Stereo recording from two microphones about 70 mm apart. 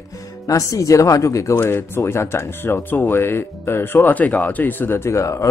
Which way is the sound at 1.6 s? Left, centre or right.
Left.